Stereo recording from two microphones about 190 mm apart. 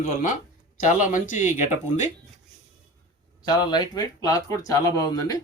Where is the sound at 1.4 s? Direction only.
15° right (ahead or behind).